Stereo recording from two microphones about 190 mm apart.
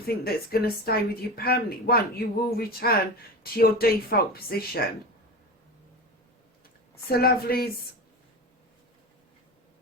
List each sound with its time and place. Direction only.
0.0 s speech: 55° left (ahead or behind)
7.1 s speech: 55° left (ahead or behind)